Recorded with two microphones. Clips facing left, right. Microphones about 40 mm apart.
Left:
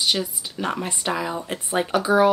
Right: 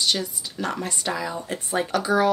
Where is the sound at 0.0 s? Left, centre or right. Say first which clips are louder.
Left 1 dB; centre.